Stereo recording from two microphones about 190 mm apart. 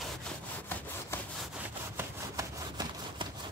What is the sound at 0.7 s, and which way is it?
Sawing, 10° left (ahead or behind).